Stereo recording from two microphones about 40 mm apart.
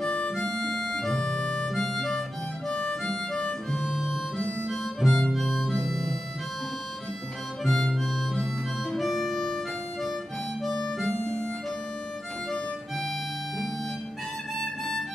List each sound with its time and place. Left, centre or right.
0.4 s harmonica: centre
2.7 s harmonica: centre
3.8 s harmonica: centre
4.6 s harmonica: centre
7.6 s harmonica: centre
7.9 s music: centre
8.9 s harmonica: centre